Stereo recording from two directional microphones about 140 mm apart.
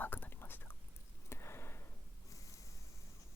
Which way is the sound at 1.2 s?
20° left (ahead or behind).